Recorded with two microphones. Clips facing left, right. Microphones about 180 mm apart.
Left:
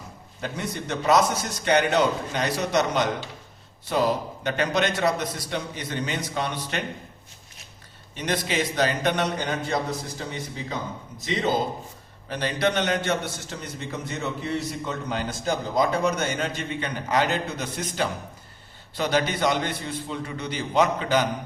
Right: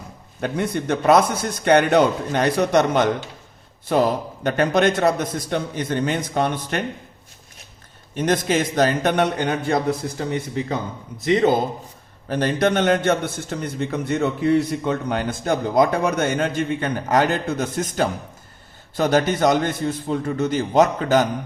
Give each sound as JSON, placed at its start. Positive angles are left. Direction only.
{"t": 0.4, "sound": "a man's voice", "side_deg": -55}
{"t": 4.4, "sound": "a man's voice", "side_deg": -50}
{"t": 8.1, "sound": "a man's voice", "side_deg": -50}
{"t": 12.3, "sound": "a man's voice", "side_deg": -50}